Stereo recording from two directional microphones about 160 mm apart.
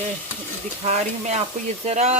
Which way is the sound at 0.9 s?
45° right (ahead or behind).